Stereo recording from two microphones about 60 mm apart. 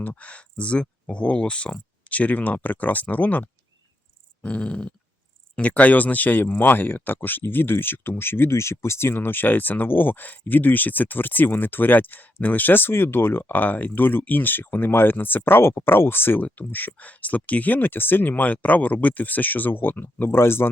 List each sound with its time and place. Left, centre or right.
0.0 s speech: left